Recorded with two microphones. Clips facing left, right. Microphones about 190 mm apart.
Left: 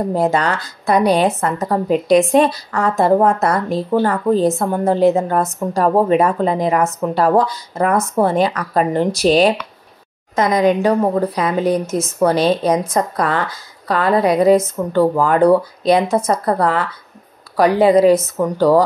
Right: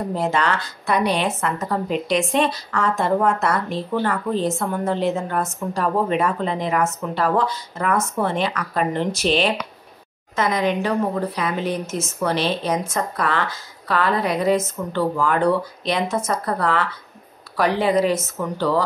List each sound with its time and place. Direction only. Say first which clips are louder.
0.1 s a woman's voice: left 3 dB; 40° left (ahead or behind)